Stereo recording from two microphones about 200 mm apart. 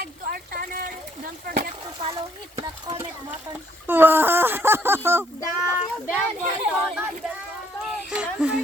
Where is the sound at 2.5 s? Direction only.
25° right (ahead or behind).